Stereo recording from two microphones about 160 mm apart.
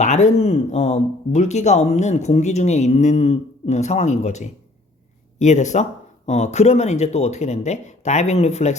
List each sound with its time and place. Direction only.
0.0 s speech: 45° left (ahead or behind)